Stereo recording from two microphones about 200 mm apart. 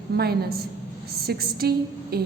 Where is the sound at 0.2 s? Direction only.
50° right (ahead or behind).